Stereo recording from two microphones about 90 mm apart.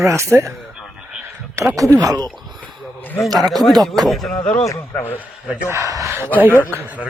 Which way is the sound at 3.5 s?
Centre (ahead or behind).